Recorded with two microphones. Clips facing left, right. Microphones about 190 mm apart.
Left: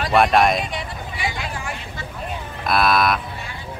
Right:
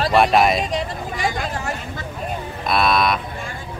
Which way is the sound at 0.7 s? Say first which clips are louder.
Right 6 dB; 45° right (ahead or behind).